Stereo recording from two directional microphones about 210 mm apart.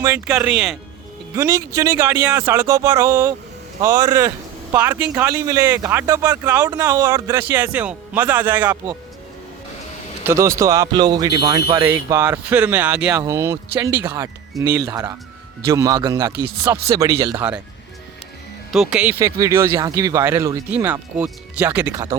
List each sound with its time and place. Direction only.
0.0 s speech: 10° right (ahead or behind)
1.4 s a man's voice: 15° right (ahead or behind)
10.2 s speech: 15° right (ahead or behind)
18.7 s speech: 5° right (ahead or behind)
19.2 s speech: 15° right (ahead or behind)